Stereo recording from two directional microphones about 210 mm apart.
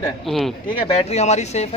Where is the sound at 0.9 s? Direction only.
30° left (ahead or behind).